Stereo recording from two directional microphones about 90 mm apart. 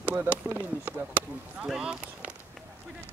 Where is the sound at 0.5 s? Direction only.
20° right (ahead or behind).